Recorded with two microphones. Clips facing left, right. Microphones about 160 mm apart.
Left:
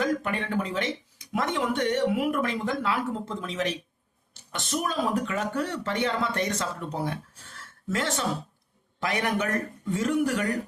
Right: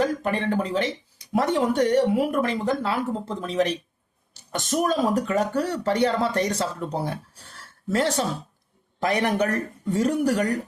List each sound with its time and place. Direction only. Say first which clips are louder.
0.0 s speech: right 4 dB; 35° right (ahead or behind)
7.6 s a sound: right 6 dB; 35° right (ahead or behind)
9.0 s speech: right 5 dB; 35° right (ahead or behind)